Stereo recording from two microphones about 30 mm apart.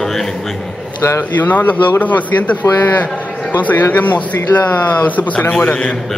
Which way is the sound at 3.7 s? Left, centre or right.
Left.